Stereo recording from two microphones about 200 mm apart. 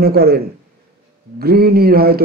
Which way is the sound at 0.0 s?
50° right (ahead or behind).